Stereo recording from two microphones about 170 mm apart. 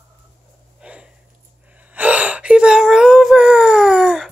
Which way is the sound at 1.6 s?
10° right (ahead or behind).